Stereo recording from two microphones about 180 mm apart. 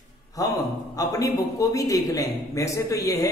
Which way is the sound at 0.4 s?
20° left (ahead or behind).